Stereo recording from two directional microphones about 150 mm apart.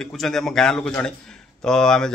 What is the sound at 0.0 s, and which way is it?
Speech, centre (ahead or behind).